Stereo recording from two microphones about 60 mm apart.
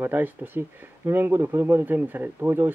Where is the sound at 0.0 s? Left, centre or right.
Right.